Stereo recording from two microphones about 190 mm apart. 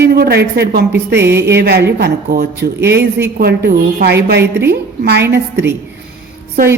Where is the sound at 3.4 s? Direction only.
60° right (ahead or behind).